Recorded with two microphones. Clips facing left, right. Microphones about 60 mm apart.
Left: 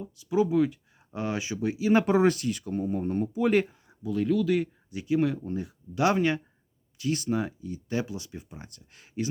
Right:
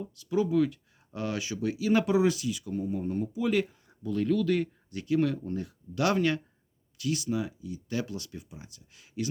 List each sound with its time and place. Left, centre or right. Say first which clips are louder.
0.0 s speech: left 3 dB; centre; by 3.6 s left
3.8 s speech: left 1 dB; centre; by 6.4 s left
7.0 s speech: left 2 dB; left
8.4 s speech: left 3 dB; left